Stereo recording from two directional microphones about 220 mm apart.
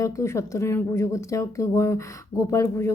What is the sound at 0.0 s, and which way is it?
Speech, 15° left (ahead or behind).